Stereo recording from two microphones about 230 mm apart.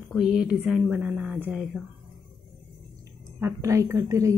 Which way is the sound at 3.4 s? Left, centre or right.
Centre.